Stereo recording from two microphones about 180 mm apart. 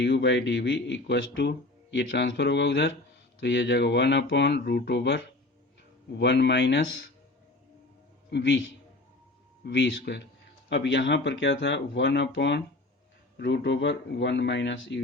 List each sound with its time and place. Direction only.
0.0 s speech: 75° left (ahead or behind)
8.3 s speech: 75° left (ahead or behind)
9.6 s speech: 75° left (ahead or behind)